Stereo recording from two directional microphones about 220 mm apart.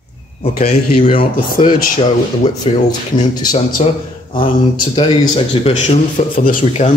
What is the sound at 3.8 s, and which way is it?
A man's voice, 30° left (ahead or behind).